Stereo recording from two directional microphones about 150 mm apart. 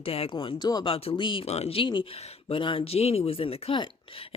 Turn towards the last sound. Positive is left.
turn(degrees=35)  # may be behind; listen again after turning